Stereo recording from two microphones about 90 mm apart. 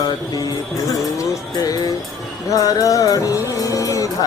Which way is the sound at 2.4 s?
40° left (ahead or behind).